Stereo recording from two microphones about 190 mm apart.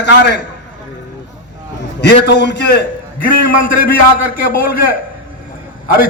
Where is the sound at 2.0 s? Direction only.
65° left (ahead or behind).